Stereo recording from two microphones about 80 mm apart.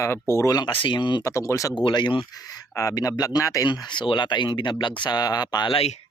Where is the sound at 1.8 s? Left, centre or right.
Left.